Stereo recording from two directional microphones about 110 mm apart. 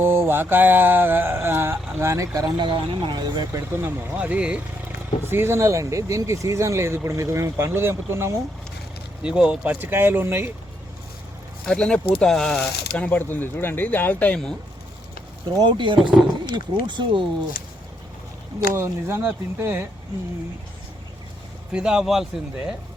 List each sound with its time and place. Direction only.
0.0 s speech: 20° right (ahead or behind)
2.6 s speech: 45° right (ahead or behind)
3.8 s speech: 20° right (ahead or behind)
5.2 s speech: 20° right (ahead or behind)
9.2 s speech: 10° right (ahead or behind)
11.6 s speech: 5° left (ahead or behind)
15.5 s speech: 45° right (ahead or behind)
18.7 s speech: 25° right (ahead or behind)
21.7 s speech: 5° right (ahead or behind)